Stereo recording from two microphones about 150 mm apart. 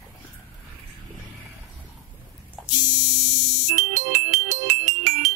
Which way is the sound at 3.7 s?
55° right (ahead or behind).